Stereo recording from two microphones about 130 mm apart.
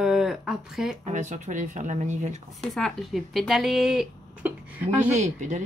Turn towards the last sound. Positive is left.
turn(degrees=-65)  # may be behind; listen again after turning